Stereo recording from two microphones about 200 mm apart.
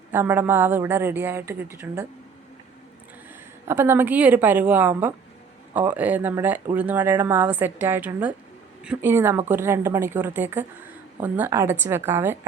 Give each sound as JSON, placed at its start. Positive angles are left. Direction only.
{"t": 0.1, "sound": "speech", "side_deg": -10}
{"t": 3.7, "sound": "speech", "side_deg": -10}